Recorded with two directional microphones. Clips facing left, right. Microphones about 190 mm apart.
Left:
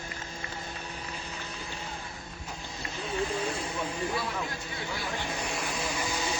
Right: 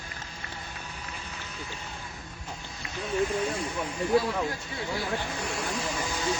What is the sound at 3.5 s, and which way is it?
Hiss, 30° left (ahead or behind).